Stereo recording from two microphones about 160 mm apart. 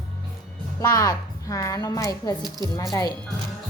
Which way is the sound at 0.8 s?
20° left (ahead or behind).